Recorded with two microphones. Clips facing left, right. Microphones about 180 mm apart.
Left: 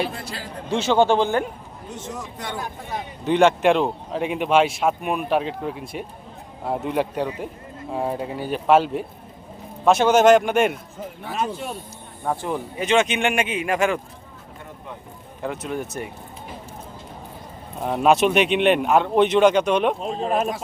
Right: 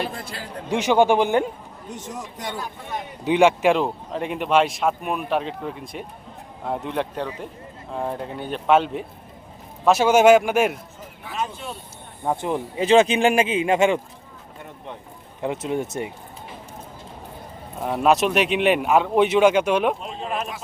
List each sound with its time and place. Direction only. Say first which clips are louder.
0.7 s a man's voice: even; 15° right (ahead or behind)
11.2 s speech: left 2 dB; 40° left (ahead or behind)
12.2 s speech: right 1 dB; 20° right (ahead or behind)
12.8 s speech: right 4 dB; 30° right (ahead or behind)
15.4 s speech: right 3 dB; 25° right (ahead or behind)
17.7 s speech: left 1 dB; centre (ahead or behind)
20.0 s speech: left 6 dB; 40° left (ahead or behind)